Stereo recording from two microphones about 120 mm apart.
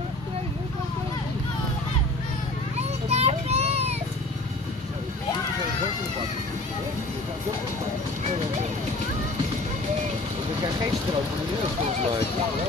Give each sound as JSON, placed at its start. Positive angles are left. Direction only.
{"t": 3.1, "sound": "child singing", "side_deg": -60}